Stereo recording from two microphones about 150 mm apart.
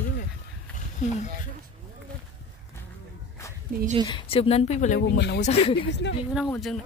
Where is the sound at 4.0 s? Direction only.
35° left (ahead or behind).